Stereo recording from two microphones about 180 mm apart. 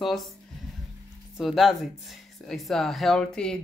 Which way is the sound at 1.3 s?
Centre (ahead or behind).